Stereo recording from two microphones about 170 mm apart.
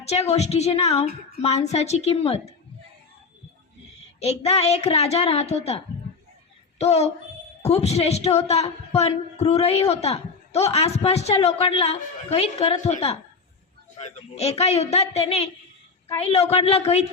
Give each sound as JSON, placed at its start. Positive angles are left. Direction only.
{"t": 0.0, "sound": "a man's voice", "side_deg": 40}
{"t": 4.2, "sound": "a man's voice", "side_deg": 35}